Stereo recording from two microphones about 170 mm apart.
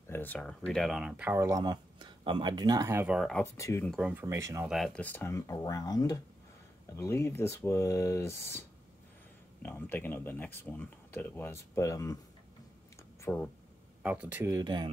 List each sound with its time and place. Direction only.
0.1 s speech: 10° left (ahead or behind); by 3.2 s 15° right (ahead or behind)
3.2 s speech: centre (ahead or behind)
3.5 s speech: 15° left (ahead or behind)
3.8 s speech: centre (ahead or behind)
4.1 s speech: 15° right (ahead or behind)
4.6 s speech: centre (ahead or behind); by 12.2 s 20° left (ahead or behind)
13.2 s speech: 10° left (ahead or behind)
14.0 s speech: 5° right (ahead or behind); by 14.9 s 25° right (ahead or behind)